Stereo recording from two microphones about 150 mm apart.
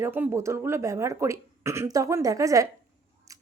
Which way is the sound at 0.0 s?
15° right (ahead or behind).